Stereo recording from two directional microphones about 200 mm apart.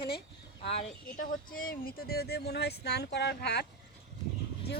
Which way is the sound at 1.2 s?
45° left (ahead or behind).